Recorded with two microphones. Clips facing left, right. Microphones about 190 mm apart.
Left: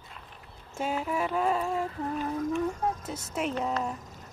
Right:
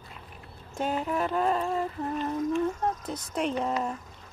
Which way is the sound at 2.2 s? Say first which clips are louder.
Right 2 dB; 5° left (ahead or behind).